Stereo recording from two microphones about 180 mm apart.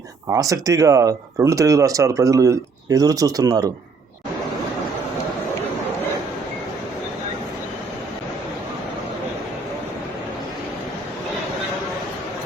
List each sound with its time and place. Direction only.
0.3 s speech: 20° right (ahead or behind)